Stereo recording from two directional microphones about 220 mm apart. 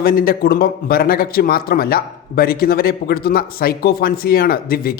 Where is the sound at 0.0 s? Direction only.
40° left (ahead or behind).